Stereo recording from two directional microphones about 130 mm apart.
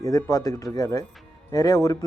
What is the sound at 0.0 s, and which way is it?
Speech, 25° left (ahead or behind).